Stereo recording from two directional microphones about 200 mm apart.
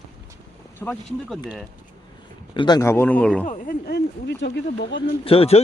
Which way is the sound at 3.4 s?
45° left (ahead or behind).